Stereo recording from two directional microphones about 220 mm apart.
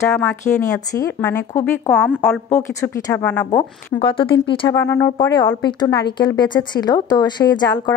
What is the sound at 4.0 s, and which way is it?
Speech, 25° left (ahead or behind).